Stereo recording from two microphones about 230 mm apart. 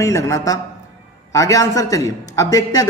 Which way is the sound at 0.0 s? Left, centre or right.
Centre.